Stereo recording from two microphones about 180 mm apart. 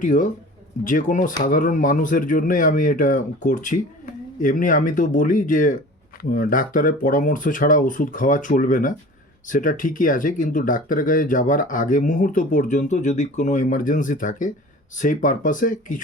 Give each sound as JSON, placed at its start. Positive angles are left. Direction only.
{"t": 0.0, "sound": "speech", "side_deg": 45}